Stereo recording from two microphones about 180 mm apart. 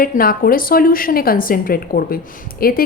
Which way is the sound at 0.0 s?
50° left (ahead or behind).